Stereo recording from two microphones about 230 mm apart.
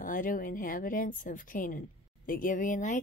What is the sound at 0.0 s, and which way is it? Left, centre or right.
Speech, left.